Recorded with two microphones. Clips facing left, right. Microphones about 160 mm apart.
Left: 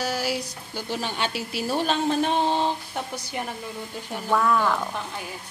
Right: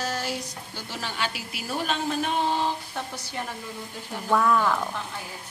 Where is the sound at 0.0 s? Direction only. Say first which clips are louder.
Left 3 dB; 5° left (ahead or behind).